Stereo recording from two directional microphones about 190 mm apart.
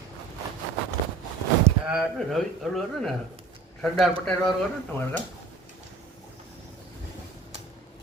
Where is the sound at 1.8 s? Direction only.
Centre (ahead or behind).